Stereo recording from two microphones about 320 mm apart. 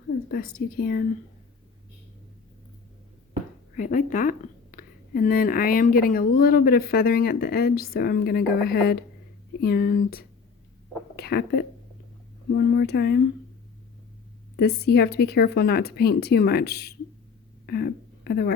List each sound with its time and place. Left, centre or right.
0.3 s a woman's voice: left
3.8 s a woman's voice: left
14.5 s a woman's voice: left